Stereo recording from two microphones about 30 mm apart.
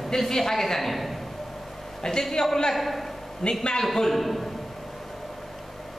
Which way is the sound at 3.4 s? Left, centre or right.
Left.